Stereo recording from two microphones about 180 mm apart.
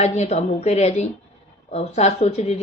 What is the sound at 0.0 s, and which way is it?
Speech, 40° left (ahead or behind).